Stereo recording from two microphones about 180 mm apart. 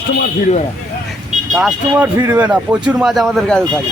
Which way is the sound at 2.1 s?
15° right (ahead or behind).